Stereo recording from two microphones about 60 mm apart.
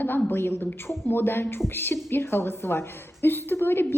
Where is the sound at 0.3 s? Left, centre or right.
Left.